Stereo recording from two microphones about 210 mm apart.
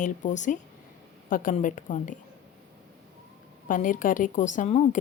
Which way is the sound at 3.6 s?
40° left (ahead or behind).